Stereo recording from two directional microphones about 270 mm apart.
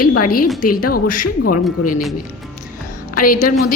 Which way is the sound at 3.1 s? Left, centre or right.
Left.